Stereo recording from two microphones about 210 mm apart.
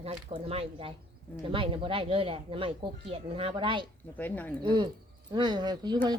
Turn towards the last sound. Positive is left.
turn(degrees=-20)  # may be behind; listen again after turning